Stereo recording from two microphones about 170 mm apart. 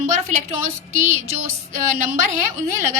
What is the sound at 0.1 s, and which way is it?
A woman's voice, 45° right (ahead or behind).